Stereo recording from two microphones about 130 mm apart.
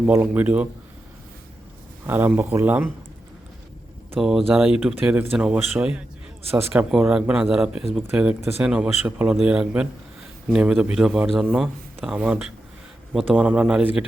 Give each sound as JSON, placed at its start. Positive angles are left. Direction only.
{"t": 0.0, "sound": "speech", "side_deg": -15}
{"t": 2.0, "sound": "speech", "side_deg": -15}
{"t": 4.1, "sound": "a man's voice", "side_deg": 0}